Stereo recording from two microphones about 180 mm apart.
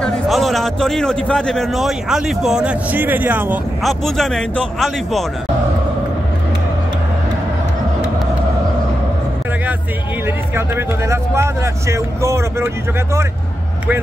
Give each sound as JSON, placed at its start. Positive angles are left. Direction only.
{"t": 0.0, "sound": "a man's voice", "side_deg": 0}
{"t": 3.8, "sound": "a man's voice", "side_deg": 0}
{"t": 10.2, "sound": "vehicle", "side_deg": -15}